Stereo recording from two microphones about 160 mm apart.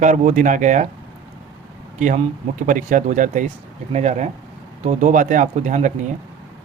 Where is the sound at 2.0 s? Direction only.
50° right (ahead or behind).